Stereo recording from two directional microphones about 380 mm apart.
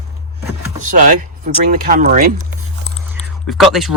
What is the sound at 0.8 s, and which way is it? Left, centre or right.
Speech, centre.